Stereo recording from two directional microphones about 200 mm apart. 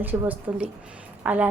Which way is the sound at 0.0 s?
10° right (ahead or behind).